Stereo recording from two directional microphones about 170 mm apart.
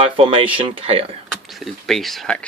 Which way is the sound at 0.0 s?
30° right (ahead or behind).